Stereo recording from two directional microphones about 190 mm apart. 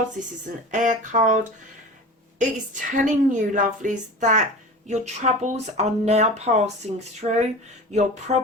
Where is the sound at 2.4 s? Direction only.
40° right (ahead or behind).